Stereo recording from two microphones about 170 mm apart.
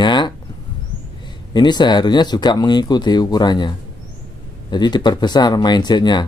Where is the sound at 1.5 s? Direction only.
25° left (ahead or behind).